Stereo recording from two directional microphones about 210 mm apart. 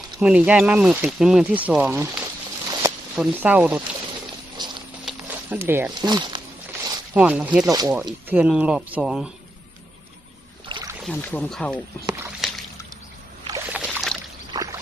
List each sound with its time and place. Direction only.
0.2 s speech: 5° right (ahead or behind)
4.5 s clip-clop: 20° right (ahead or behind)
5.0 s a sound: 10° right (ahead or behind)
6.0 s speech: 20° right (ahead or behind)
7.1 s speech: 5° right (ahead or behind)
7.6 s speech: 15° right (ahead or behind)
8.3 s speech: 5° right (ahead or behind)
10.7 s rowboat: 25° right (ahead or behind)
11.0 s speech: 5° left (ahead or behind)
12.4 s a sound: centre (ahead or behind)
13.5 s rowboat: 5° right (ahead or behind)
14.5 s pour: 15° right (ahead or behind)